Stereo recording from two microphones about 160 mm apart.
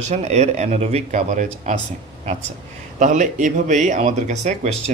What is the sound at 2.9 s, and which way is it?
Speech, 50° right (ahead or behind).